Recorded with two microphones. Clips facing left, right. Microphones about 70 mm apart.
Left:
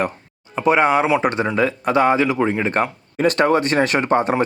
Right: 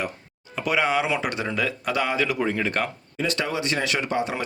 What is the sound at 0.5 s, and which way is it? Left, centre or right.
Speech, left.